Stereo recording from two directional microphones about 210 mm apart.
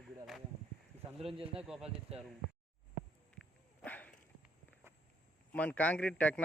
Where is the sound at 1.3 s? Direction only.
25° right (ahead or behind).